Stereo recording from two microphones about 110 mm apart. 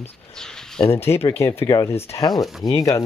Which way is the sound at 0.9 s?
25° left (ahead or behind).